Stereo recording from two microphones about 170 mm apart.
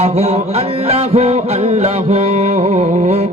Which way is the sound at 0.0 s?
40° right (ahead or behind).